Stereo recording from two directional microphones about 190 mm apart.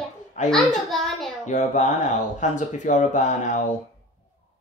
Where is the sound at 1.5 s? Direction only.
40° left (ahead or behind).